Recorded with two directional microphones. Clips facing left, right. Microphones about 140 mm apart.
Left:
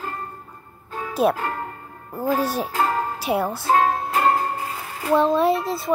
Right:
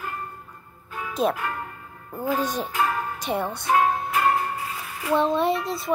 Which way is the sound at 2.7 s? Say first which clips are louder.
Left 3 dB; 35° left (ahead or behind).